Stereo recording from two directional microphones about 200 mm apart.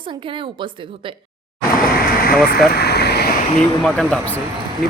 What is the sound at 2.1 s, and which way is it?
Vehicle, 50° left (ahead or behind).